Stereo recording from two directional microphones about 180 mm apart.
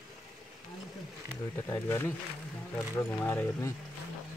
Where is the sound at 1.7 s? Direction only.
15° left (ahead or behind).